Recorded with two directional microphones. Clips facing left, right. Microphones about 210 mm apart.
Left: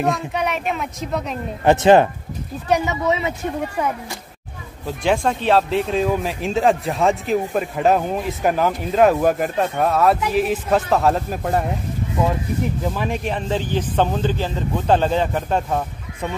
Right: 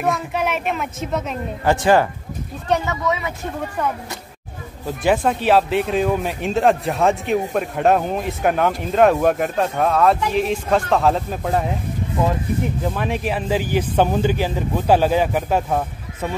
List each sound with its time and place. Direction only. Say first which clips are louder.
0.0 s speech: even; centre (ahead or behind)
1.6 s a woman's voice: left 3 dB; 20° left (ahead or behind)
3.1 s a woman's voice: left 2 dB; 25° left (ahead or behind)
4.8 s speech: right 1 dB; 5° right (ahead or behind)
12.8 s a man's voice: right 1 dB; centre (ahead or behind)